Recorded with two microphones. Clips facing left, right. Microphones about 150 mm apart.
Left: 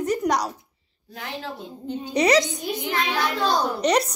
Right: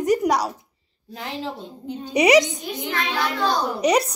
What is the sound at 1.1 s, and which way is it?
A woman's voice, 25° right (ahead or behind).